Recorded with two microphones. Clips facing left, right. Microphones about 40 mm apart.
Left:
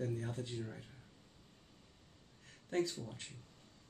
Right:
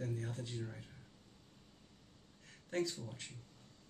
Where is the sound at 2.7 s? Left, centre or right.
Left.